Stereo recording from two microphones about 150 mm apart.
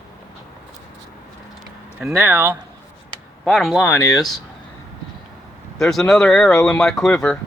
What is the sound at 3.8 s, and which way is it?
Speech, 25° left (ahead or behind).